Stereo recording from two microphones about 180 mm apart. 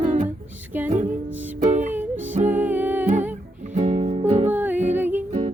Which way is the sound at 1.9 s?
10° right (ahead or behind).